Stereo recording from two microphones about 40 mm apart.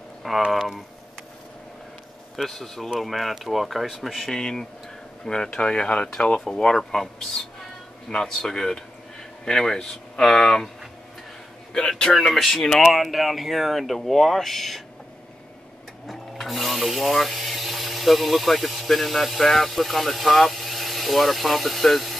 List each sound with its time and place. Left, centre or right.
0.2 s speech: centre
2.3 s speech: centre
4.3 s speech: centre
6.8 s speech: centre
11.9 s speech: centre
16.1 s speech: centre